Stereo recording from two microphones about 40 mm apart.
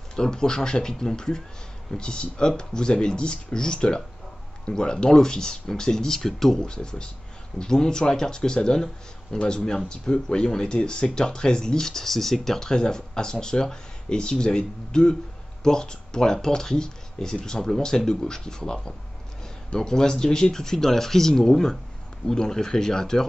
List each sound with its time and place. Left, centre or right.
0.1 s speech: centre